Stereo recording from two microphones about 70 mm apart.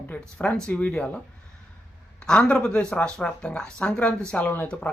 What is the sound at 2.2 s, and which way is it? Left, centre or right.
Speech, centre.